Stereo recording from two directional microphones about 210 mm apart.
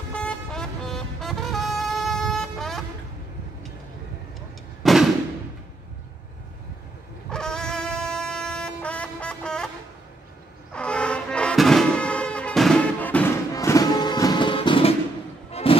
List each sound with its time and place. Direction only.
0.2 s music: 5° left (ahead or behind)
4.8 s fireworks: centre (ahead or behind)
7.2 s music: 5° left (ahead or behind)
10.7 s music: 5° left (ahead or behind); by 15.8 s 25° left (ahead or behind)